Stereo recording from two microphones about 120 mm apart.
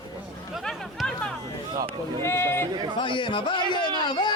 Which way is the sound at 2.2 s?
20° left (ahead or behind).